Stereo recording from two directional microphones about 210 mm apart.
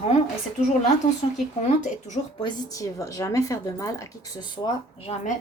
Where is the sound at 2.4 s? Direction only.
15° left (ahead or behind).